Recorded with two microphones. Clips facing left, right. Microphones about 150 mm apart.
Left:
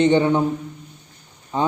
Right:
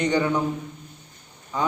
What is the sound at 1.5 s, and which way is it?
Speech, 25° left (ahead or behind).